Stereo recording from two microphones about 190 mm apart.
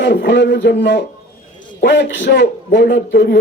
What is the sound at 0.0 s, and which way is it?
A man's voice, 65° left (ahead or behind).